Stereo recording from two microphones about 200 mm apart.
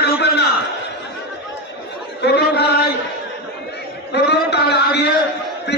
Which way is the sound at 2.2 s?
60° left (ahead or behind).